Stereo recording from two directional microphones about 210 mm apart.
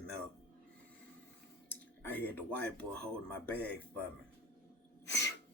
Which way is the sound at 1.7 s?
10° left (ahead or behind).